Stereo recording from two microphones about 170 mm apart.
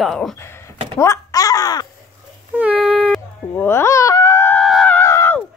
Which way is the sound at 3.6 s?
15° left (ahead or behind).